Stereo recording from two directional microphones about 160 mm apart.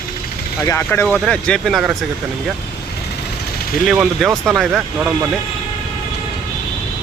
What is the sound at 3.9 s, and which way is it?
Speech, 5° right (ahead or behind).